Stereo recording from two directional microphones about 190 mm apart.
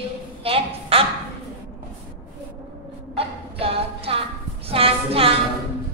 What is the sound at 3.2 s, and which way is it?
Music, 30° right (ahead or behind).